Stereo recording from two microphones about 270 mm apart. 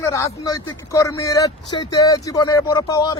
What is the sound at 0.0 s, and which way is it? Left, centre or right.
Speech, centre.